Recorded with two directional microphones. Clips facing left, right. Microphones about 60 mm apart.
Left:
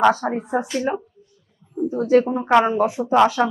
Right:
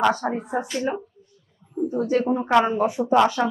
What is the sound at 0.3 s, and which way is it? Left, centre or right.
A woman's voice, left.